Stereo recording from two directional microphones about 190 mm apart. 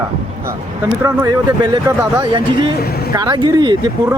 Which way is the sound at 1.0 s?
20° right (ahead or behind).